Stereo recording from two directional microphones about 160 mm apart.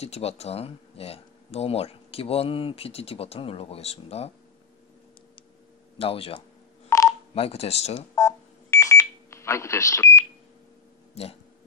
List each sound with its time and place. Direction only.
0.0 s speech: 40° left (ahead or behind)
5.9 s speech: 35° left (ahead or behind)
6.9 s telephone dialing: 20° left (ahead or behind)
7.3 s speech: 40° left (ahead or behind)
8.1 s smoke detector: 20° left (ahead or behind)